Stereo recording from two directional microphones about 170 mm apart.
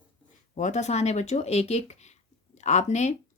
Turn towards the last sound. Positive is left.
turn(degrees=45)  # may be behind; listen again after turning